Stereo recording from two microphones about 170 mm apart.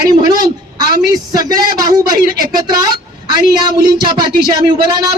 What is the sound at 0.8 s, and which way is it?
A woman's voice, 25° right (ahead or behind).